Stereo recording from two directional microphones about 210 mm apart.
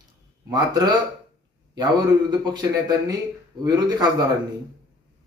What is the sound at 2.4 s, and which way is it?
A man's voice, 20° right (ahead or behind).